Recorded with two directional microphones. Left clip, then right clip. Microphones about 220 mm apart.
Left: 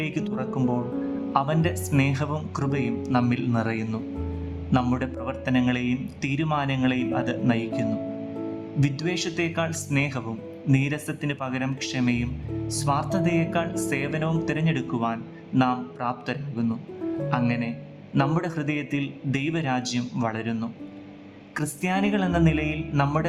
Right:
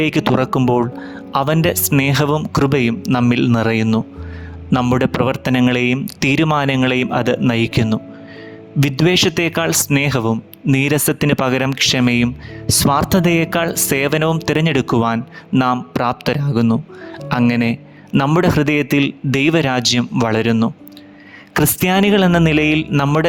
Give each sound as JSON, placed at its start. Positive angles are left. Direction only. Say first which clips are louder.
{"t": 0.0, "sound": "speech", "louder": "right 14 dB", "side_deg": -45}